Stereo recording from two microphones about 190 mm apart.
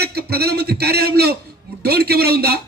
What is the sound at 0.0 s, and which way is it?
A man's voice, 55° right (ahead or behind).